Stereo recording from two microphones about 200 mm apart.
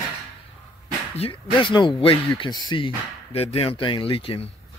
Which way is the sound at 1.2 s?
25° left (ahead or behind).